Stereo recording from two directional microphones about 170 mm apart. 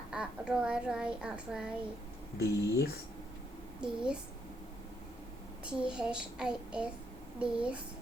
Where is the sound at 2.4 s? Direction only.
70° left (ahead or behind).